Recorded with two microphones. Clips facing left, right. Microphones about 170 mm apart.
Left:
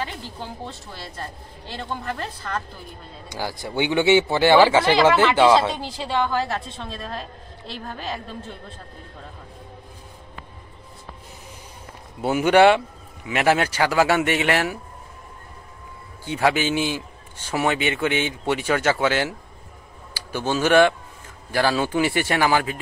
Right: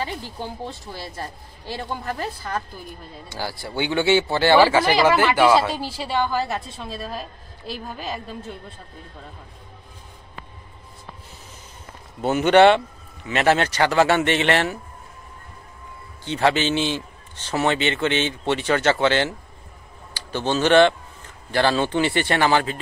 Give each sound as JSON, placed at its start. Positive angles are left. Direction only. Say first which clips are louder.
{"t": 0.4, "sound": "speech", "louder": "right 3 dB", "side_deg": -15}
{"t": 3.3, "sound": "speech", "louder": "left 1 dB", "side_deg": 15}
{"t": 5.7, "sound": "a woman's voice", "louder": "even", "side_deg": -5}
{"t": 12.2, "sound": "a man's voice", "louder": "right 1 dB", "side_deg": 10}
{"t": 16.3, "sound": "a man's voice", "louder": "right 1 dB", "side_deg": 10}